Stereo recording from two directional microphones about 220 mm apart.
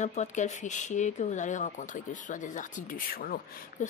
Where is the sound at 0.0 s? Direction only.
30° left (ahead or behind).